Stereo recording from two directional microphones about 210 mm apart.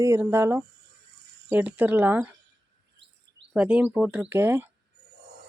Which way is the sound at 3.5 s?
5° right (ahead or behind).